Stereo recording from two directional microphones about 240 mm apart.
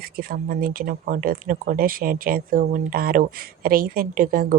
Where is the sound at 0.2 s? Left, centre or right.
Right.